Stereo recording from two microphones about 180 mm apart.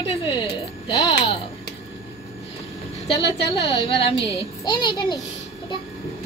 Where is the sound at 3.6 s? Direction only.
25° left (ahead or behind).